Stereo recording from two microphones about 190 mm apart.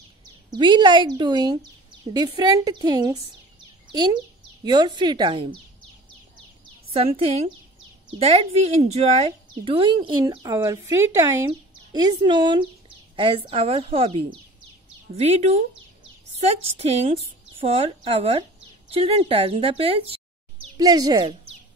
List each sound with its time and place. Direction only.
0.2 s a child's voice: 25° right (ahead or behind)
6.9 s a woman's voice: 30° right (ahead or behind)
20.7 s a child's voice: 20° right (ahead or behind)